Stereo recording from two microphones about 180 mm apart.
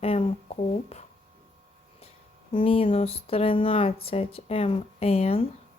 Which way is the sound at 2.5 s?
30° left (ahead or behind).